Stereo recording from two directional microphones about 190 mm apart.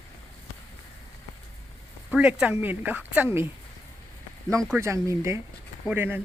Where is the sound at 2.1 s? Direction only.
5° right (ahead or behind).